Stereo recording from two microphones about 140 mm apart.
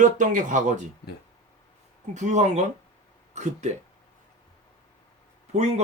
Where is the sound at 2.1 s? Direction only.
55° right (ahead or behind).